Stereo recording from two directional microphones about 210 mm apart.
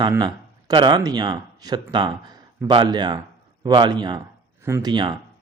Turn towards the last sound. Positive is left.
turn(degrees=-20)  # may be behind; listen again after turning